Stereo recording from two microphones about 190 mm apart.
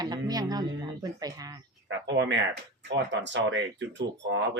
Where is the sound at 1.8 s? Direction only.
70° right (ahead or behind).